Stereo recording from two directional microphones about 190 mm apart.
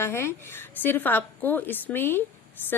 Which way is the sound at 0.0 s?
15° left (ahead or behind).